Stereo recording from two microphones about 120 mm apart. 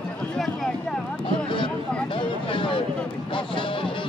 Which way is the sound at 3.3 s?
45° left (ahead or behind).